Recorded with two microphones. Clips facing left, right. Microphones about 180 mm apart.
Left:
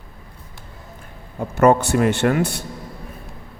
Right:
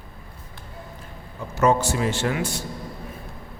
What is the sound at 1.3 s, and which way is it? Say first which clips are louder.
A man's voice: left 5 dB; 55° left (ahead or behind).